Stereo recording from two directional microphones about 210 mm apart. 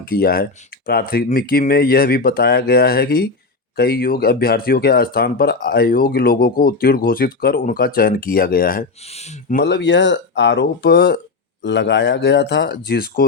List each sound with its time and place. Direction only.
0.0 s speech: 45° left (ahead or behind)
9.0 s speech: 30° left (ahead or behind)
9.6 s speech: 55° left (ahead or behind)